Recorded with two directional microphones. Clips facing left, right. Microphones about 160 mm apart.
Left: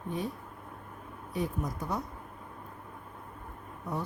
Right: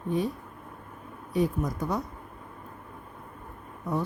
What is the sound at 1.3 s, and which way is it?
Speech, 90° right.